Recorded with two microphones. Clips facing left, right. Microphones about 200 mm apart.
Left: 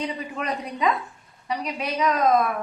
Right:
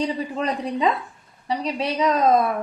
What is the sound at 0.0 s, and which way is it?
A woman's voice, 30° right (ahead or behind).